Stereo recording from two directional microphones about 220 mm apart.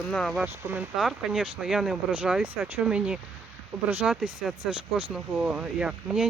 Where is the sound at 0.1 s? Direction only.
Centre (ahead or behind).